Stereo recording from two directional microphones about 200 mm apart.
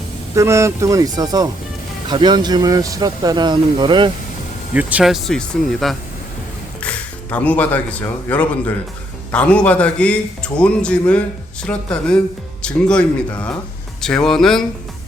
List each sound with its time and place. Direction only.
0.3 s speech: 15° right (ahead or behind)
4.7 s a man's voice: 5° right (ahead or behind)